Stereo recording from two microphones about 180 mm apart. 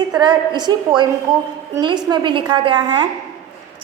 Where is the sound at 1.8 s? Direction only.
25° right (ahead or behind).